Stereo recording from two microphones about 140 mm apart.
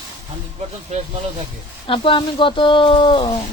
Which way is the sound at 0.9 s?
55° right (ahead or behind).